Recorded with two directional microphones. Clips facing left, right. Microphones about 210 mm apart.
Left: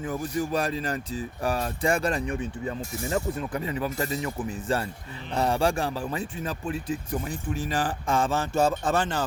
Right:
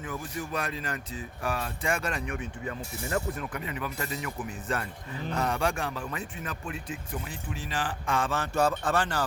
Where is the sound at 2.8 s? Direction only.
45° left (ahead or behind).